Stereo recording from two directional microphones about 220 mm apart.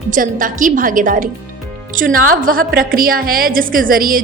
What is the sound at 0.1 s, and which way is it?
A woman's voice, 40° right (ahead or behind).